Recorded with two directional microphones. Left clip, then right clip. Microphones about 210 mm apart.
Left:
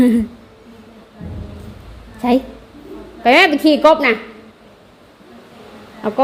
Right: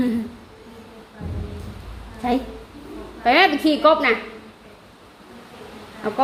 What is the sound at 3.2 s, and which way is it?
Speech, 40° left (ahead or behind).